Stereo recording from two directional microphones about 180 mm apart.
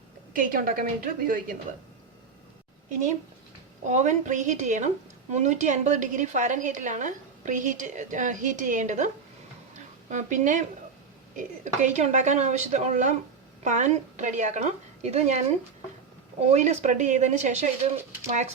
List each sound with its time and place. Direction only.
0.3 s a woman's voice: 50° right (ahead or behind)
3.8 s a woman's voice: 40° right (ahead or behind)
9.7 s a sound: 45° right (ahead or behind)
11.3 s speech: 45° right (ahead or behind)
16.5 s speech: 40° right (ahead or behind)